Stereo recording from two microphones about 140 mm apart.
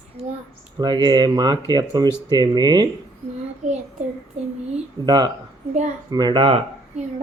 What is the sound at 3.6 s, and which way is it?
Speech, 60° right (ahead or behind).